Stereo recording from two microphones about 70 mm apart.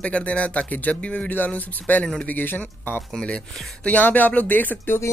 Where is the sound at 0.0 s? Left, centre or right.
Centre.